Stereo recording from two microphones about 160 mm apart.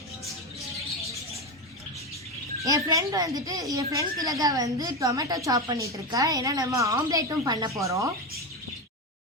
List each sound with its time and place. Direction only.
2.6 s a woman's voice: 20° right (ahead or behind)